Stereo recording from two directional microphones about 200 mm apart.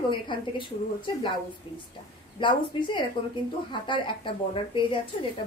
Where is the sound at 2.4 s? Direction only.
25° left (ahead or behind).